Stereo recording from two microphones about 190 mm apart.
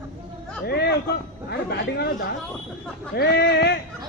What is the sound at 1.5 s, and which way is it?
Speech, 60° left (ahead or behind).